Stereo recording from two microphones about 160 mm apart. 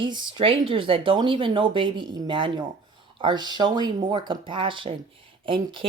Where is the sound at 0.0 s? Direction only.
30° right (ahead or behind).